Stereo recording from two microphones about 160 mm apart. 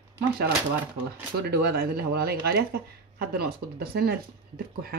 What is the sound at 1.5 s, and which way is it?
Speech, 80° right.